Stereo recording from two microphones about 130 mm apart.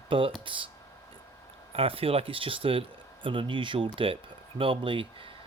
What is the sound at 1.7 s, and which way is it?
Speech, 45° right (ahead or behind).